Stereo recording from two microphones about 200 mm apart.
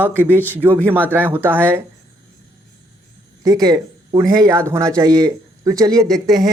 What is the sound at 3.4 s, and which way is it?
Speech, 20° right (ahead or behind).